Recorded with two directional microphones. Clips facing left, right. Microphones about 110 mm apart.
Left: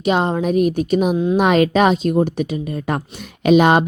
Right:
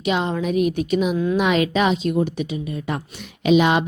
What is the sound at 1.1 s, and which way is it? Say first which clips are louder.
Speech: left 3 dB; 25° left (ahead or behind).